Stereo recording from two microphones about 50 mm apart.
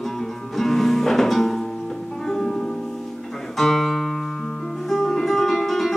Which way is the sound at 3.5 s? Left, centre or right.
Centre.